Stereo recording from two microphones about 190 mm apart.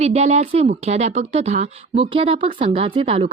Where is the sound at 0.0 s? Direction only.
35° right (ahead or behind).